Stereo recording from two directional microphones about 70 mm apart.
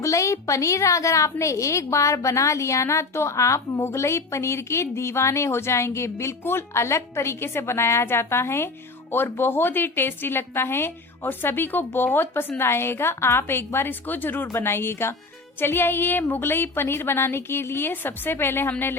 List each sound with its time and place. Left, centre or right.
0.0 s a woman's voice: left